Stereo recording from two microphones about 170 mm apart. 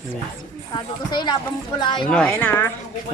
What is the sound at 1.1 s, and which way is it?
Speech, 25° left (ahead or behind).